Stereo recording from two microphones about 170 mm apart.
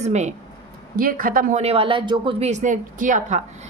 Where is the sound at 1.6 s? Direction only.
35° right (ahead or behind).